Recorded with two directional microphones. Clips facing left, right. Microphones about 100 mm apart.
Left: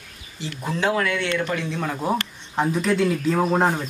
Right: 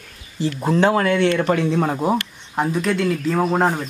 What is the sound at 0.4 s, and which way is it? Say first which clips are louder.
Speech: right 8 dB; 40° right (ahead or behind).